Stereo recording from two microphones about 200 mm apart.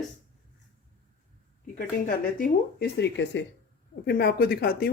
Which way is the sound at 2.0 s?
50° left (ahead or behind).